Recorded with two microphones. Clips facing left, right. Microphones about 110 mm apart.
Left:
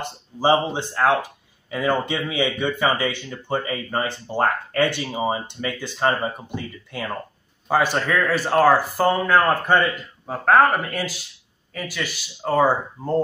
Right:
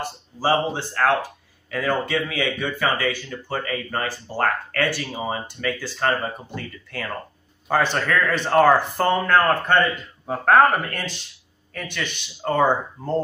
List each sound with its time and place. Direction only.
0.0 s speech: 20° left (ahead or behind)